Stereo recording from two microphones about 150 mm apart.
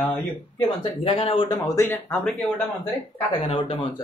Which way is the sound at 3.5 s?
35° left (ahead or behind).